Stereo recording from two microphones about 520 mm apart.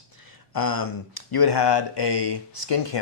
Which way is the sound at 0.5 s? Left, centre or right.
Left.